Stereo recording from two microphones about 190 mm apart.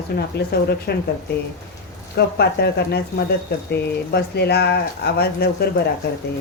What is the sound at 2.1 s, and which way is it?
Speech, 60° left (ahead or behind).